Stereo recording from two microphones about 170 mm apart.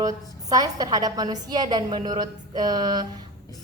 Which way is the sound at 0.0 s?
20° right (ahead or behind).